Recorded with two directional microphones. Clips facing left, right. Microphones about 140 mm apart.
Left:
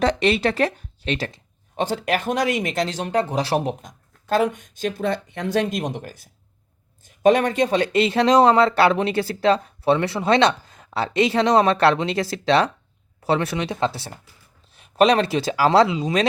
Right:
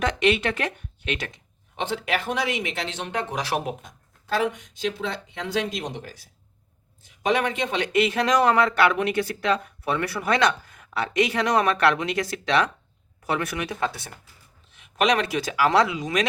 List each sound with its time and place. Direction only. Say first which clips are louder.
0.0 s speech: left 3 dB; 35° left (ahead or behind)